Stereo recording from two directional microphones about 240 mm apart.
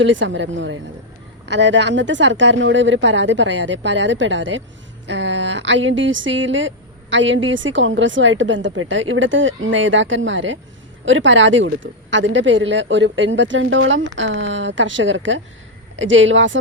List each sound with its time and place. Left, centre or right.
0.0 s speech: right